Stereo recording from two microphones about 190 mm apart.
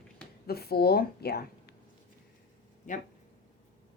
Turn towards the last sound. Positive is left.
turn(degrees=40)  # may be behind; listen again after turning